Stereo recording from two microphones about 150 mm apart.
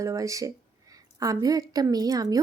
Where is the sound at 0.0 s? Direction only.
20° right (ahead or behind).